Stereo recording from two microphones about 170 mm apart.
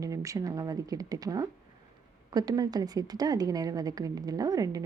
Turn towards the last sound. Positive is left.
turn(degrees=-20)  # may be behind; listen again after turning